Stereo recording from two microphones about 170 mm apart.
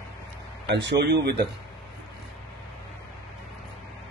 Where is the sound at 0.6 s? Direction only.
90° right.